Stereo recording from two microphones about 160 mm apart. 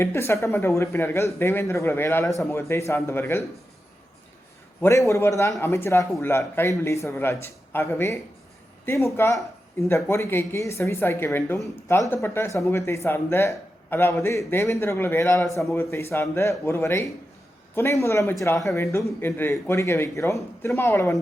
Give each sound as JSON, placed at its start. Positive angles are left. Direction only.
{"t": 0.0, "sound": "a woman's voice", "side_deg": 15}
{"t": 4.8, "sound": "a woman's voice", "side_deg": 20}